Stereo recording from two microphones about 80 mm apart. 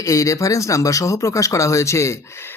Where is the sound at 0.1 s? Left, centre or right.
Left.